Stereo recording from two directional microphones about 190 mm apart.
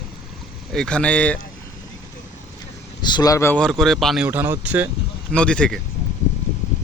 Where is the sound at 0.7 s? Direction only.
5° left (ahead or behind).